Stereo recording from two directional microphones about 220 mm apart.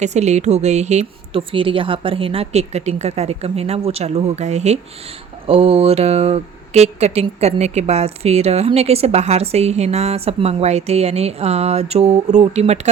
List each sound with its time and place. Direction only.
0.0 s speech: 30° right (ahead or behind)